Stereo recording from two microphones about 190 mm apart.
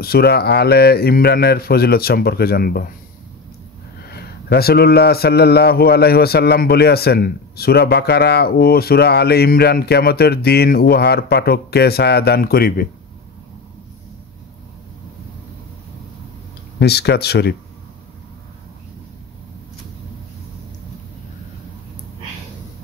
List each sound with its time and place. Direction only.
0.0 s speech: 55° left (ahead or behind)
4.1 s speech: 55° left (ahead or behind)
16.8 s speech: 60° left (ahead or behind)